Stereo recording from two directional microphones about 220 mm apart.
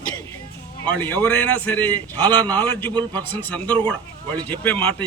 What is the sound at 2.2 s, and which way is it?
Speech, 20° right (ahead or behind).